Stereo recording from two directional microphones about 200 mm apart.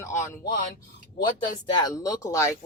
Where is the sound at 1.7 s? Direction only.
20° left (ahead or behind).